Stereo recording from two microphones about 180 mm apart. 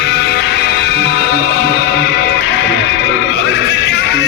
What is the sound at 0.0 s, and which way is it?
Music, 70° left (ahead or behind).